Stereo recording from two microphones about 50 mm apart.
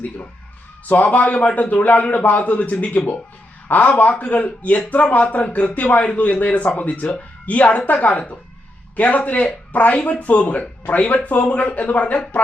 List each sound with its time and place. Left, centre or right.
0.9 s a man's voice: left